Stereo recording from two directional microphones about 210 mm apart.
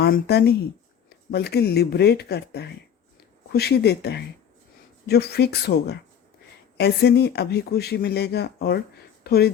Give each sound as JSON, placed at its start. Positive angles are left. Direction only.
{"t": 0.0, "sound": "speech", "side_deg": 50}